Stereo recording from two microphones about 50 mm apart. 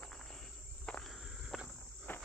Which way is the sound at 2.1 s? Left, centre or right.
Left.